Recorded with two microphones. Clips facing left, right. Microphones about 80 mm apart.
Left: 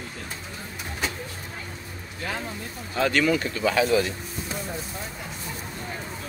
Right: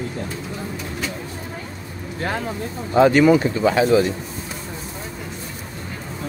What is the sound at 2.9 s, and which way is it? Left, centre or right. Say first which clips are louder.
Speech: right 9 dB; right.